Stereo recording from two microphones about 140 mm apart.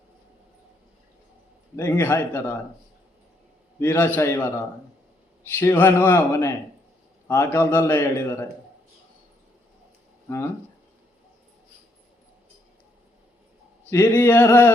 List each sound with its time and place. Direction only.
1.7 s a man's voice: 15° left (ahead or behind)
3.8 s a man's voice: 15° left (ahead or behind)
10.2 s speech: 15° left (ahead or behind)
13.9 s a man's voice: 15° left (ahead or behind)